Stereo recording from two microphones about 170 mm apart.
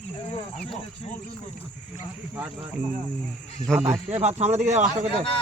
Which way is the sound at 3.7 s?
5° left (ahead or behind).